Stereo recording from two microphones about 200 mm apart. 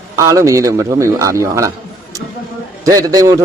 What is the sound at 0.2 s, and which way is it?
A man's voice, 15° right (ahead or behind).